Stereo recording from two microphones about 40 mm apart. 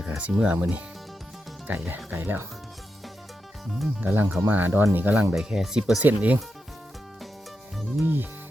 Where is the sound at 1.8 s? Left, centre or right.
Right.